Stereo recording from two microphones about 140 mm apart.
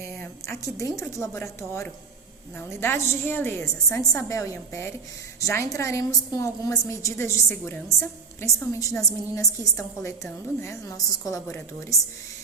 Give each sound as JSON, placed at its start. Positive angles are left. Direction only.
{"t": 0.8, "sound": "a woman's voice", "side_deg": 20}